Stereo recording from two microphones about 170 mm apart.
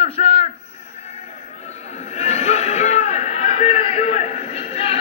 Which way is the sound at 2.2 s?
40° left (ahead or behind).